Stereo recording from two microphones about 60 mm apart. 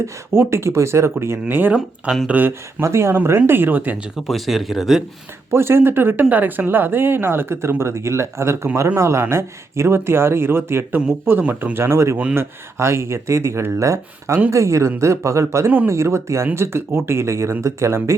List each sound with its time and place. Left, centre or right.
0.0 s speech: right
1.2 s speech: right
2.8 s speech: right
4.3 s speech: centre
5.5 s a man's voice: right